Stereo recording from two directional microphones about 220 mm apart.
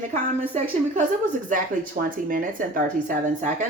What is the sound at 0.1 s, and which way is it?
Speech, 30° right (ahead or behind).